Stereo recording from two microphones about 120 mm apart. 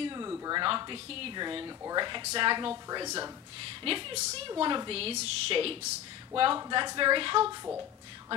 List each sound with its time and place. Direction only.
0.0 s a sound: 35° right (ahead or behind)
0.6 s a woman's voice: 40° right (ahead or behind)
3.6 s a woman's voice: 50° right (ahead or behind)
4.5 s a woman's voice: 40° right (ahead or behind)